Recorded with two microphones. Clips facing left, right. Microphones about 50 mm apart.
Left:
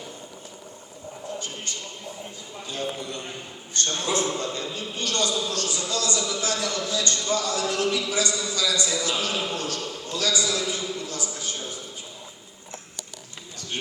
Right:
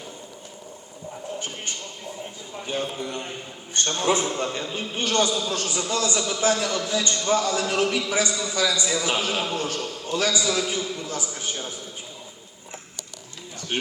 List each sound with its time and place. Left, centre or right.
2.6 s a man's voice: right